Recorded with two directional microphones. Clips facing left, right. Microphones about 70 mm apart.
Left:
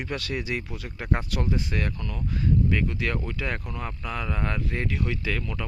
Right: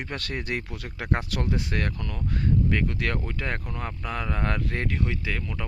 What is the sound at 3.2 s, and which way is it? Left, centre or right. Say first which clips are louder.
Speech: even; right.